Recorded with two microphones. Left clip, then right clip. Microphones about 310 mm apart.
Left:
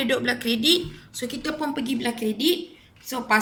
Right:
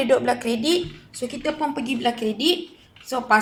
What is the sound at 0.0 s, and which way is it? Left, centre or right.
Speech, right.